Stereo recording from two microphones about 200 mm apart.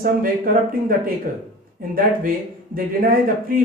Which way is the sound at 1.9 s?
45° right (ahead or behind).